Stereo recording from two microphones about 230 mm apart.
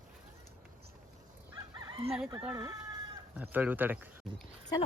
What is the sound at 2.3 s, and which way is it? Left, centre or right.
Speech, centre.